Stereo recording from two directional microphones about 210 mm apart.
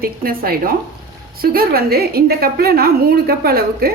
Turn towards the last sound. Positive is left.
turn(degrees=-45)  # may be behind; listen again after turning